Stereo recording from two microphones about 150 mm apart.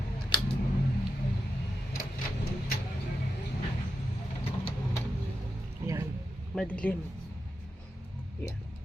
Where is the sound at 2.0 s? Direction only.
90° left.